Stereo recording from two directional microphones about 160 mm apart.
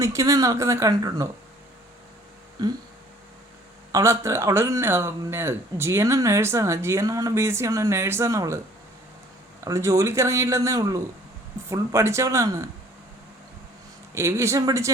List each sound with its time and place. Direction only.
0.0 s speech: 20° right (ahead or behind)
3.9 s speech: 20° right (ahead or behind)
9.6 s speech: 20° right (ahead or behind)
14.1 s speech: 15° right (ahead or behind)